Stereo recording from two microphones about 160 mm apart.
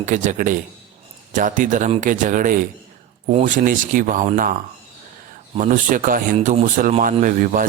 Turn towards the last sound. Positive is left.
turn(degrees=-55)  # may be behind; listen again after turning